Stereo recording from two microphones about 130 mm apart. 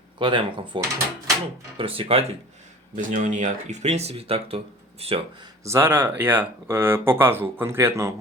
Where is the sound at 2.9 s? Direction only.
75° right (ahead or behind); by 5.5 s 40° right (ahead or behind).